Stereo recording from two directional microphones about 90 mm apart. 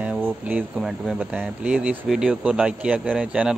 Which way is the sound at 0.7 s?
5° right (ahead or behind).